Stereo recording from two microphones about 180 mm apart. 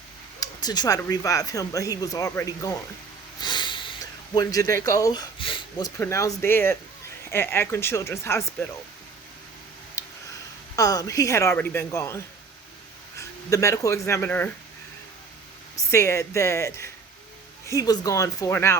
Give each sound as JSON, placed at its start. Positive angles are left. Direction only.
{"t": 0.3, "sound": "a woman's voice", "side_deg": 20}
{"t": 10.0, "sound": "tick-tock", "side_deg": 15}
{"t": 10.8, "sound": "a woman's voice", "side_deg": 20}
{"t": 15.9, "sound": "a woman's voice", "side_deg": 15}